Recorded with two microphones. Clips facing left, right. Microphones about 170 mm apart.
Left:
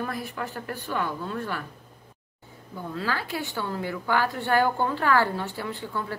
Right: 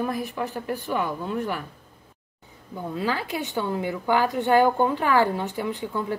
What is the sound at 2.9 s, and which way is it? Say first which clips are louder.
A woman's voice: right 3 dB; 20° right (ahead or behind).